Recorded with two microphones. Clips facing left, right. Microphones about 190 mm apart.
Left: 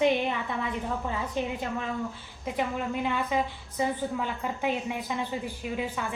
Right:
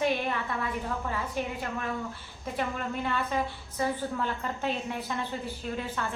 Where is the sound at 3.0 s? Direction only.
15° left (ahead or behind).